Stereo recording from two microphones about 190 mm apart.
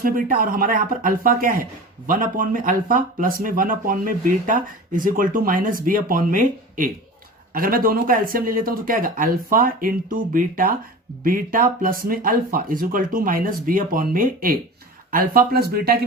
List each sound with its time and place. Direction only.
0.0 s speech: 45° right (ahead or behind)